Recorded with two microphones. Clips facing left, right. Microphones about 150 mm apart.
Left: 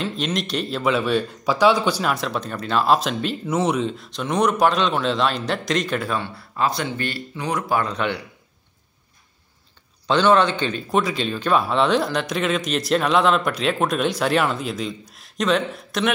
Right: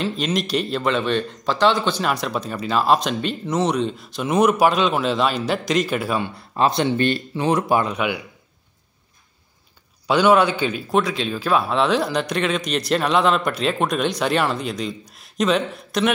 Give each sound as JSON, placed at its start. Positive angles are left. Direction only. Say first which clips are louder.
{"t": 0.0, "sound": "speech", "louder": "right 2 dB", "side_deg": 0}
{"t": 2.0, "sound": "speech", "louder": "right 1 dB", "side_deg": 0}
{"t": 6.5, "sound": "speech", "louder": "right 4 dB", "side_deg": -25}
{"t": 10.0, "sound": "speech", "louder": "right 1 dB", "side_deg": -10}